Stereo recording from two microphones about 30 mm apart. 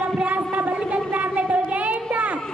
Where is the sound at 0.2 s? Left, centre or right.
Right.